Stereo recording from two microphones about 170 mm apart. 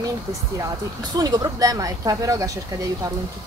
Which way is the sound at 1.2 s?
20° right (ahead or behind).